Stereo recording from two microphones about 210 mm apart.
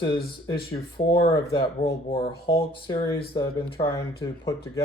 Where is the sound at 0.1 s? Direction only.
45° left (ahead or behind).